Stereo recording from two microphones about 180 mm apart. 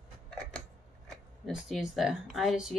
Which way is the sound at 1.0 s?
Centre (ahead or behind).